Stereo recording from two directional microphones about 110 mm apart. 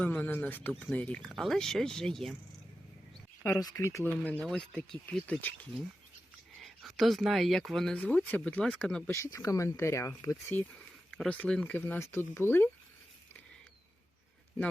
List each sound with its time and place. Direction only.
0.0 s speech: 15° left (ahead or behind)
3.6 s speech: 30° left (ahead or behind); by 5.5 s 15° left (ahead or behind)
6.6 s speech: centre (ahead or behind)
8.0 s speech: 15° left (ahead or behind)
9.0 s speech: 25° left (ahead or behind)
11.1 s a sound: 5° left (ahead or behind)
11.3 s speech: 10° left (ahead or behind)